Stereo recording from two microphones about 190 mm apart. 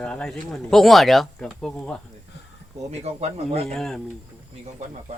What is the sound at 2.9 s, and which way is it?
Speech, 35° right (ahead or behind).